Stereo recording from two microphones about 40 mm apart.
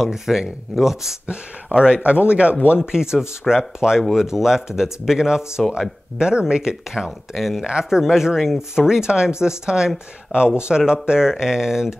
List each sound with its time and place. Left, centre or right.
0.0 s speech: centre
1.2 s speech: right
2.8 s speech: centre
7.0 s speech: centre
7.6 s speech: right